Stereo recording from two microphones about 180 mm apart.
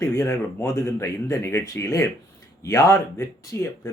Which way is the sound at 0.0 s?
15° left (ahead or behind).